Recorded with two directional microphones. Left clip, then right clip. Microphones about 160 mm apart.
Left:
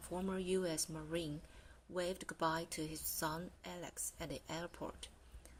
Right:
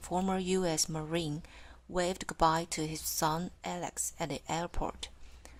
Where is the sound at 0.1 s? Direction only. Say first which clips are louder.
Right 8 dB; 30° right (ahead or behind).